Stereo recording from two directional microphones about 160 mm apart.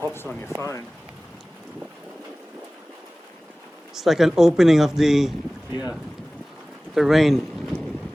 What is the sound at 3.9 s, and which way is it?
Speech, centre (ahead or behind).